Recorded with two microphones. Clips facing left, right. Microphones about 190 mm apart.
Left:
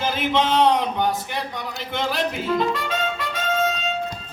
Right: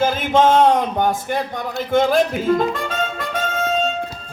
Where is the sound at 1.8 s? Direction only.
45° right (ahead or behind).